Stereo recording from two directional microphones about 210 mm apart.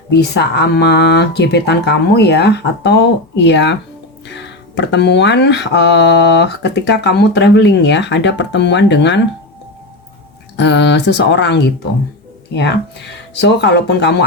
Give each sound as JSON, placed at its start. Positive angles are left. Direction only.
{"t": 0.1, "sound": "speech", "side_deg": 55}
{"t": 10.6, "sound": "speech", "side_deg": 55}